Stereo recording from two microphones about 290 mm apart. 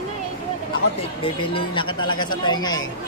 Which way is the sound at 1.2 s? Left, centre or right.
Centre.